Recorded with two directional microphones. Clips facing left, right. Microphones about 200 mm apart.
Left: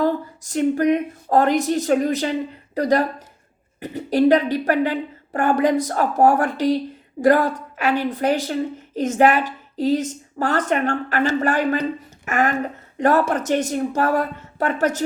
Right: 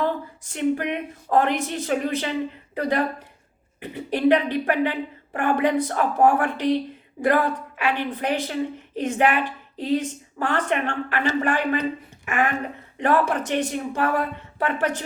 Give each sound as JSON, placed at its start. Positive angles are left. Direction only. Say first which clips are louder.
{"t": 0.0, "sound": "a woman's voice", "louder": "left 4 dB", "side_deg": 40}